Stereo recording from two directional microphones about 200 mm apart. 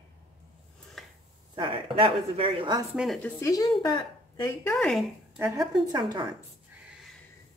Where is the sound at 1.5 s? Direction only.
25° right (ahead or behind).